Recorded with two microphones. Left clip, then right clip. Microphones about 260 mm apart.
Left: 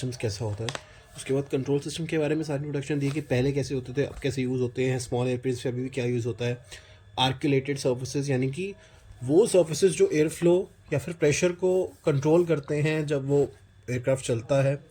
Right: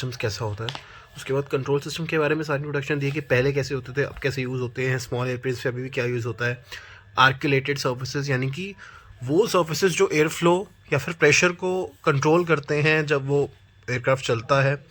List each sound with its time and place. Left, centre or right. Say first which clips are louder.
0.0 s speech: right 4 dB; centre
11.4 s speech: right 1 dB; right
12.5 s speech: right 6 dB; centre
13.1 s speech: right 2 dB; right
13.8 s speech: right 4 dB; centre